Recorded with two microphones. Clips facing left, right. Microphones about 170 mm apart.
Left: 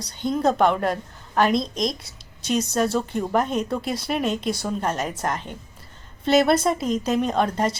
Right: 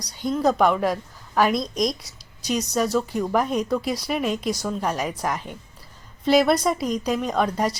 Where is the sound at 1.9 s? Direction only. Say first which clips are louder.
Right 2 dB; 25° left (ahead or behind).